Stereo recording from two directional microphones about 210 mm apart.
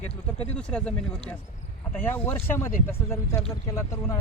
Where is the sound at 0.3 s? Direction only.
30° left (ahead or behind).